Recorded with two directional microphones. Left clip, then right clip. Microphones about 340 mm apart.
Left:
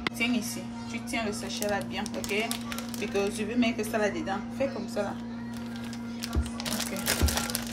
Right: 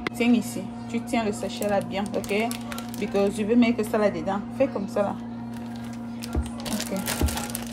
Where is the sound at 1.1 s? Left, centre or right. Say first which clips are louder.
Right 5 dB; centre.